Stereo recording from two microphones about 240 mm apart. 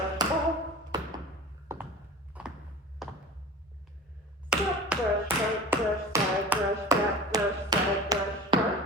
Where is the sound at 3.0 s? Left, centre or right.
Centre.